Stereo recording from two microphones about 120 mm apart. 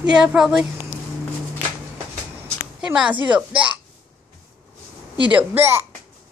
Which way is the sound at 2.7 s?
10° right (ahead or behind).